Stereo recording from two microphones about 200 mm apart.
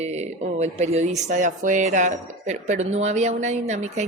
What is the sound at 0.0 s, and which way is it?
Speech, 35° right (ahead or behind).